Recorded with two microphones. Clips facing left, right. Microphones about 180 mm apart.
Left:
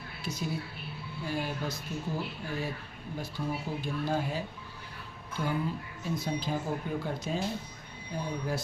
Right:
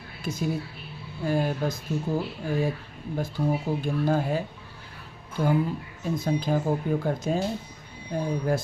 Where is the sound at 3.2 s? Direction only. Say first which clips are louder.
Right 8 dB; 50° right (ahead or behind).